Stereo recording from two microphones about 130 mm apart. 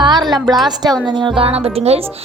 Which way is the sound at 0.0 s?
35° right (ahead or behind).